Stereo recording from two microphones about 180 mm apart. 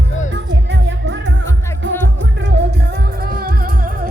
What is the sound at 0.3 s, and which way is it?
Music, 80° right.